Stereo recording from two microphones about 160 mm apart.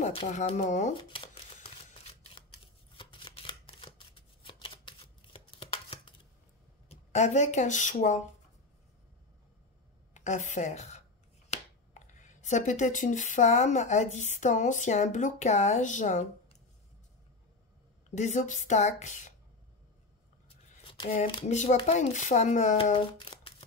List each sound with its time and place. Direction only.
0.0 s a woman's voice: 40° left (ahead or behind)
0.9 s a sound: 30° left (ahead or behind)
1.9 s camera: 40° left (ahead or behind)
3.0 s shuffling cards: 30° left (ahead or behind)
6.9 s speech: 45° left (ahead or behind)
10.1 s speech: 50° left (ahead or behind)
18.1 s a woman's voice: 50° left (ahead or behind)
20.4 s scissors: 35° left (ahead or behind)
21.5 s a woman's voice: 45° left (ahead or behind)
22.9 s a sound: 30° left (ahead or behind)